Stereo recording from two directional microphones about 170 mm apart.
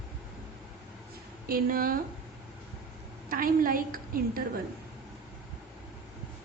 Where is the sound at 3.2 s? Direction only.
55° right (ahead or behind).